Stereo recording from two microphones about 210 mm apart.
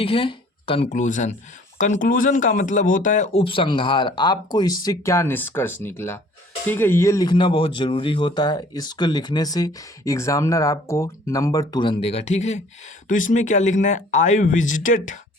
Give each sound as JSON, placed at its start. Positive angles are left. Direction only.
{"t": 0.0, "sound": "speech", "side_deg": 25}